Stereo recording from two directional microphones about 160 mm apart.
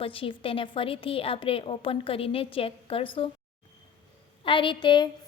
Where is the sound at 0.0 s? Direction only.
35° left (ahead or behind).